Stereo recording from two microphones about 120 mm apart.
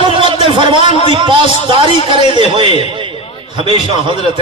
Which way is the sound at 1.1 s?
45° right (ahead or behind).